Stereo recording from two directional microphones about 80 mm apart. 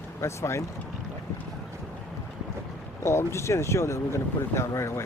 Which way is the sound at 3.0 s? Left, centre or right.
Left.